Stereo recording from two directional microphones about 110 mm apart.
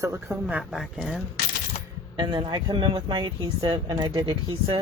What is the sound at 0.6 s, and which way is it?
Speech, centre (ahead or behind).